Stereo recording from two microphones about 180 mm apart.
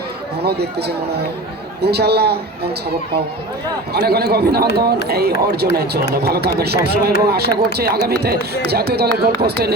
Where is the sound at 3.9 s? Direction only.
60° right (ahead or behind).